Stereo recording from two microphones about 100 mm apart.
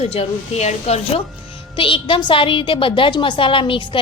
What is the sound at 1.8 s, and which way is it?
A woman's voice, 60° left (ahead or behind).